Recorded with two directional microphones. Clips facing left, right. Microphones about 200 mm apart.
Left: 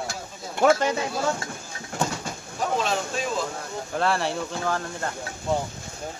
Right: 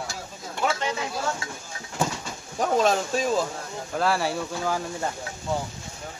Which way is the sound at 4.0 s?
Centre (ahead or behind).